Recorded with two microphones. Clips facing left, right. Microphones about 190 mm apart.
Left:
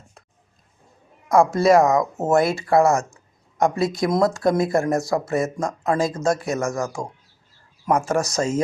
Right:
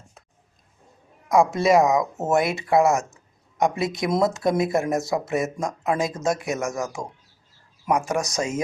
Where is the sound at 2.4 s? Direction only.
20° right (ahead or behind).